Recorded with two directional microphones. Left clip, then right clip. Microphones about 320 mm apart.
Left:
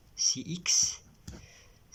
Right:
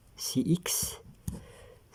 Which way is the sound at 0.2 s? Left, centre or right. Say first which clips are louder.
Even; right.